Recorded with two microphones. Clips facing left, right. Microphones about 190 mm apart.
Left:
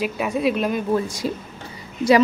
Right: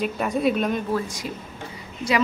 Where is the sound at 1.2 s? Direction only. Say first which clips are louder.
Left 7 dB; 35° left (ahead or behind).